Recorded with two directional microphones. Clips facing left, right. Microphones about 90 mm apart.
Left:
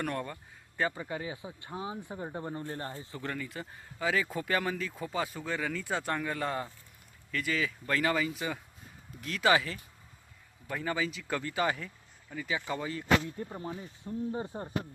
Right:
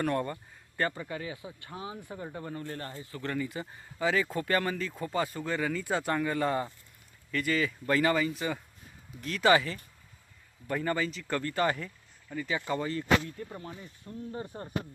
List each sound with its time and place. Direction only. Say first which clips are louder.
0.0 s speech: right 5 dB; centre (ahead or behind)
0.9 s speech: even; 20° left (ahead or behind)
3.3 s speech: right 5 dB; 5° right (ahead or behind)
13.5 s speech: left 3 dB; 25° left (ahead or behind)